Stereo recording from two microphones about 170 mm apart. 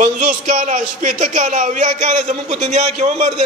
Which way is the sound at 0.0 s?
50° right (ahead or behind).